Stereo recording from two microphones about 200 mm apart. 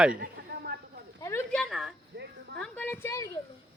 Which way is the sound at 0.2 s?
50° right (ahead or behind).